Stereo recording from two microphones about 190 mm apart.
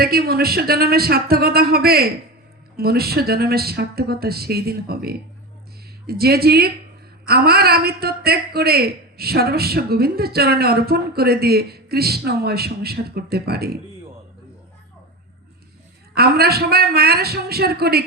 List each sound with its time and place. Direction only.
0.0 s a woman's voice: 55° right (ahead or behind)
16.1 s a woman's voice: 55° right (ahead or behind)